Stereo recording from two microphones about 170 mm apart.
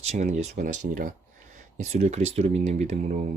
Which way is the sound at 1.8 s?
40° right (ahead or behind).